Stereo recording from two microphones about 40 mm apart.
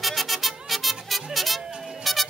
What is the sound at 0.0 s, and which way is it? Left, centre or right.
Music, centre.